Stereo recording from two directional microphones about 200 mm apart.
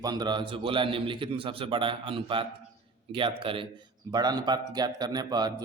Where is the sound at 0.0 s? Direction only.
20° right (ahead or behind).